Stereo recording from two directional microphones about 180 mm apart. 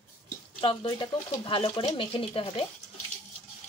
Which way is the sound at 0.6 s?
30° left (ahead or behind).